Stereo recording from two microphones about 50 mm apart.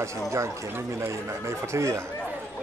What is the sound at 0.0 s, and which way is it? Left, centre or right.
Speech, right.